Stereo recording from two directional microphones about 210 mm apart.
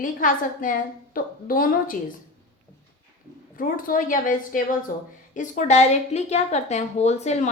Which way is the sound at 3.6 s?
40° left (ahead or behind).